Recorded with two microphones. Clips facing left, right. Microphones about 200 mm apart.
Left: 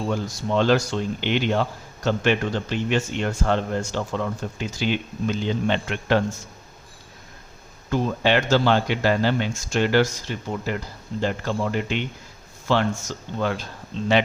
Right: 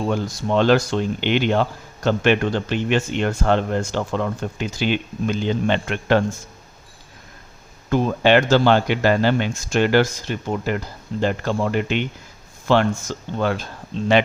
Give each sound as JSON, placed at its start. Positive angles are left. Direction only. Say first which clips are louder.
{"t": 0.1, "sound": "speech", "louder": "right 3 dB", "side_deg": -65}
{"t": 7.9, "sound": "speech", "louder": "right 4 dB", "side_deg": -60}